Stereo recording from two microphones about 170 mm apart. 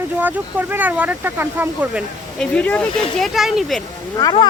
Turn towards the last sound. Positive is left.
turn(degrees=25)  # may be behind; listen again after turning